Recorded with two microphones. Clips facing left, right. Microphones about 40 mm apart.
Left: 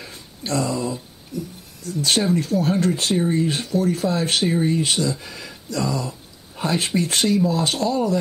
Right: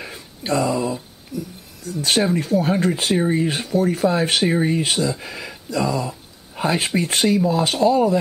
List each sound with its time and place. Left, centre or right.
0.0 s a sound: right
0.6 s speech: centre
1.3 s speech: centre
4.8 s speech: centre